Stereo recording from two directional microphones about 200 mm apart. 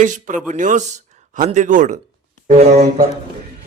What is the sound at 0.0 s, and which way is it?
A man's voice, 40° right (ahead or behind).